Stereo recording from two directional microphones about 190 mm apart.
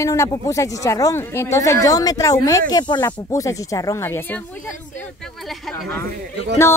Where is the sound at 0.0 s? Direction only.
15° left (ahead or behind).